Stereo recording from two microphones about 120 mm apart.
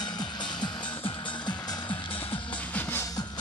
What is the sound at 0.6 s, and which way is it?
Music, 40° left (ahead or behind).